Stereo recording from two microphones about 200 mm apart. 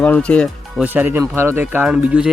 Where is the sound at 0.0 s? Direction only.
5° left (ahead or behind).